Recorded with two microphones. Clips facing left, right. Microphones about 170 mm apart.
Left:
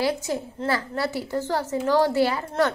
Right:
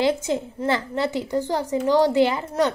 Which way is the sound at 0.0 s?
20° right (ahead or behind).